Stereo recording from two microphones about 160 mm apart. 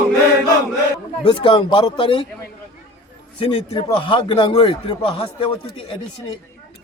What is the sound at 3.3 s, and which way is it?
Speech, 35° left (ahead or behind).